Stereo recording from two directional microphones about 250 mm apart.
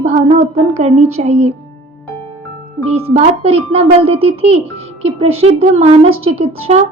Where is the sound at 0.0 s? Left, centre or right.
Right.